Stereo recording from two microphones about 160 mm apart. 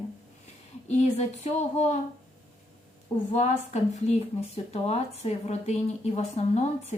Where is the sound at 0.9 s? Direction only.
45° left (ahead or behind).